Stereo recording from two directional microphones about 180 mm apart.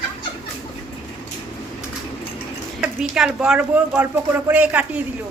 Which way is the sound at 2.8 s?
5° right (ahead or behind).